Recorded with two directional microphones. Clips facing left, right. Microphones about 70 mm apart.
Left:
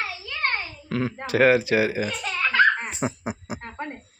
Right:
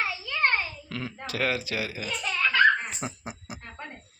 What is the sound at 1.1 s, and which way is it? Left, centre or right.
Speech, left.